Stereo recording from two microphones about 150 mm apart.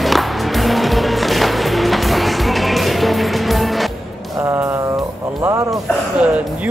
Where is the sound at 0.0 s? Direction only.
Centre (ahead or behind).